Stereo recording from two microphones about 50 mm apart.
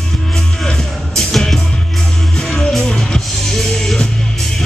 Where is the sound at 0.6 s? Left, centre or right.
Centre.